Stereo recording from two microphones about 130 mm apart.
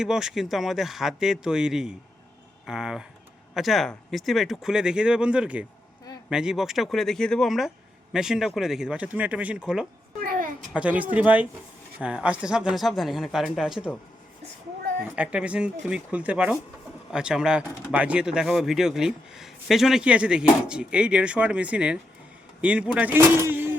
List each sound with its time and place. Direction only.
0.0 s speech: 5° right (ahead or behind)
10.2 s a sound: 90° right
10.8 s speech: 10° right (ahead or behind)
15.1 s speech: 10° right (ahead or behind)